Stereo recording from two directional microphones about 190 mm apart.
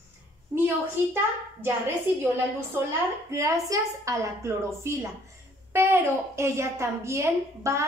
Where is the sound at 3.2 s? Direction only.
15° right (ahead or behind).